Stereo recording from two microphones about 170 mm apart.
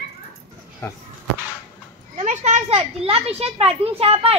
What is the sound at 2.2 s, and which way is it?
A child's voice, 40° right (ahead or behind).